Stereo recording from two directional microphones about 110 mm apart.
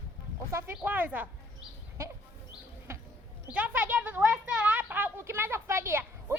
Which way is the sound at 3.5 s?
15° right (ahead or behind).